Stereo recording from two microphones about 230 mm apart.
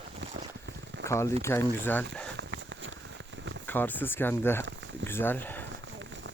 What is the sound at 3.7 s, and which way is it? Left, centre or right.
Speech, centre.